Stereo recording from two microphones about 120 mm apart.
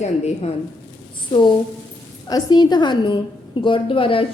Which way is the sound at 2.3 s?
35° left (ahead or behind).